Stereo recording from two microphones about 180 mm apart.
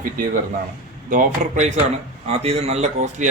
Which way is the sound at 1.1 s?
45° right (ahead or behind).